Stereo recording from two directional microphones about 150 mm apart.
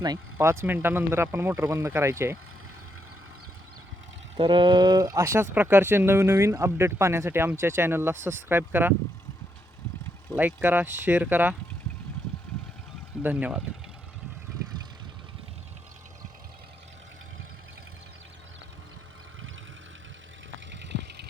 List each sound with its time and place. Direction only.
0.3 s speech: 15° right (ahead or behind)
4.4 s speech: 35° right (ahead or behind); by 9.0 s 15° right (ahead or behind)
10.3 s speech: 10° right (ahead or behind)
13.2 s speech: 10° right (ahead or behind)